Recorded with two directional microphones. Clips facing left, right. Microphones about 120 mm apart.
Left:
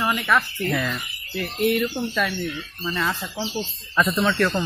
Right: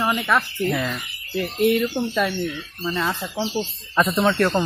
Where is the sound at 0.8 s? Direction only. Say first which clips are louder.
Even; 25° right (ahead or behind).